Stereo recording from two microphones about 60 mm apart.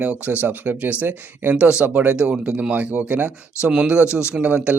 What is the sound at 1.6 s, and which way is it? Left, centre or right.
A man's voice, centre.